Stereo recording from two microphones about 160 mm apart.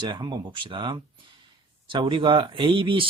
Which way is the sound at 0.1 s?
30° right (ahead or behind).